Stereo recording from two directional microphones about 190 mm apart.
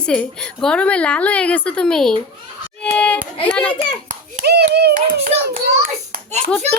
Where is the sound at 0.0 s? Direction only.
5° left (ahead or behind).